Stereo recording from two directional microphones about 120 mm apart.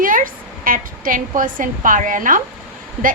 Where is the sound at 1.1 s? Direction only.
90° right.